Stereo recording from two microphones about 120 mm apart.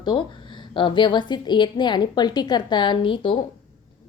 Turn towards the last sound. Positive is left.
turn(degrees=45)  # may be behind; listen again after turning